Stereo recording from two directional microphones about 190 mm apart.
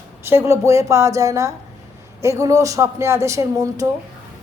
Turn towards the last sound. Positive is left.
turn(degrees=-15)  # may be behind; listen again after turning